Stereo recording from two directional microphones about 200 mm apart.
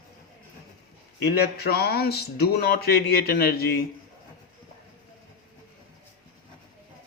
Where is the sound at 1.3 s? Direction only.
50° left (ahead or behind).